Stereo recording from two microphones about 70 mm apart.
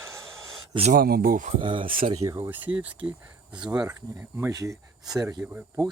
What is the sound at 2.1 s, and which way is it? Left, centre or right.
Speech, right.